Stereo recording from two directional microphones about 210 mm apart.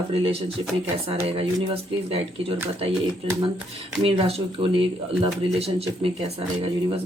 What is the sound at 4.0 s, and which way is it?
Speech, 30° right (ahead or behind).